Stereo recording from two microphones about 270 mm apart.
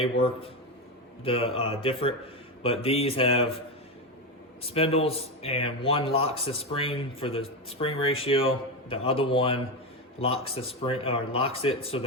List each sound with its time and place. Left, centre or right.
0.0 s a man's voice: left
4.6 s a man's voice: left